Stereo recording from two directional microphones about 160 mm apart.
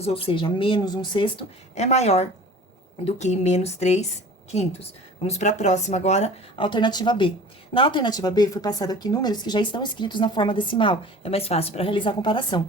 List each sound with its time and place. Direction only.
0.0 s speech: 35° left (ahead or behind)
1.7 s speech: 45° left (ahead or behind)
6.6 s speech: 30° left (ahead or behind)